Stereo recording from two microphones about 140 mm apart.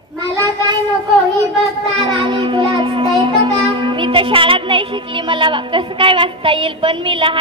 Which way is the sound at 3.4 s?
35° right (ahead or behind).